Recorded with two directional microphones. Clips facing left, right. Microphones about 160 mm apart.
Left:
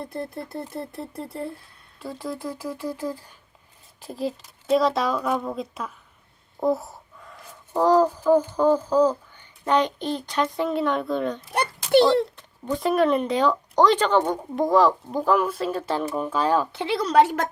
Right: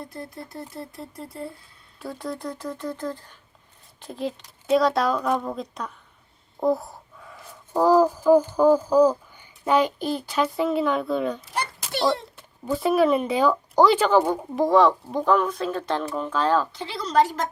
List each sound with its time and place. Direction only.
0.4 s speech: 60° left (ahead or behind)
2.0 s speech: centre (ahead or behind)
16.7 s speech: 60° left (ahead or behind)